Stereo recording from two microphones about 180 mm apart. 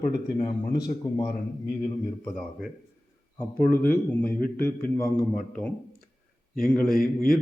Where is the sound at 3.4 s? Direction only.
10° left (ahead or behind).